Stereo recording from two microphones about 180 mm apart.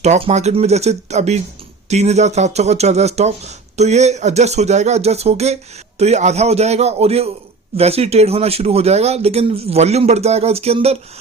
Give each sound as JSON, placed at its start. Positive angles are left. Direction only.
{"t": 0.0, "sound": "speech", "side_deg": -40}